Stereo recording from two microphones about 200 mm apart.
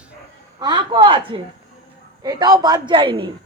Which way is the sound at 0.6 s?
20° right (ahead or behind).